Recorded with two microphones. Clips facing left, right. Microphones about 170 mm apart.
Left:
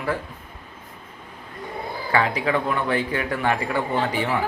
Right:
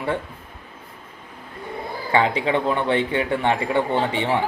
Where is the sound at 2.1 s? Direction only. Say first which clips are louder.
Right 2 dB; 25° right (ahead or behind).